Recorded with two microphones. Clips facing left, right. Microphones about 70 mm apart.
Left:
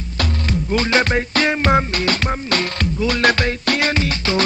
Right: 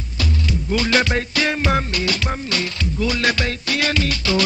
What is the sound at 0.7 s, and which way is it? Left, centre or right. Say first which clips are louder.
Music: left 1 dB; left.